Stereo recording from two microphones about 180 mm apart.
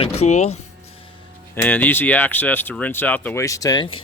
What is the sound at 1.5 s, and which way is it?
Speech, 10° left (ahead or behind).